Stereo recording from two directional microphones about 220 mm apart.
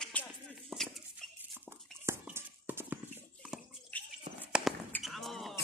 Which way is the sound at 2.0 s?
10° right (ahead or behind).